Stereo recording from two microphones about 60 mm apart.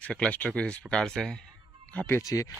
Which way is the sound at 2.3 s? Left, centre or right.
Left.